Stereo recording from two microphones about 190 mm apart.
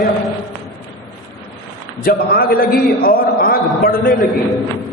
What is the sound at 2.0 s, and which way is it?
A man's voice, 50° left (ahead or behind).